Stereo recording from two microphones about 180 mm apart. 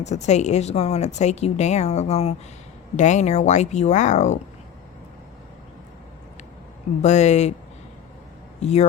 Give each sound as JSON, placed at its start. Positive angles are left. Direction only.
{"t": 0.0, "sound": "speech", "side_deg": 40}
{"t": 7.0, "sound": "speech", "side_deg": 40}
{"t": 8.6, "sound": "speech", "side_deg": 35}